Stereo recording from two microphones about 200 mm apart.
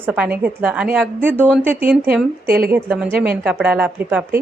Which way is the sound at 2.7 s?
10° right (ahead or behind).